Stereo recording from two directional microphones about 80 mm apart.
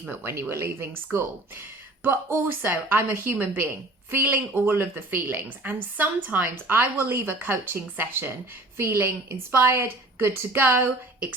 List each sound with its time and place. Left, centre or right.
0.1 s a woman's voice: right